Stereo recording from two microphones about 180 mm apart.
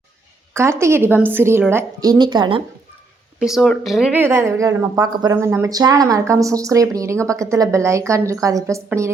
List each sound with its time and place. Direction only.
0.5 s a woman's voice: 15° right (ahead or behind)
3.4 s a woman's voice: centre (ahead or behind); by 9.0 s 15° right (ahead or behind)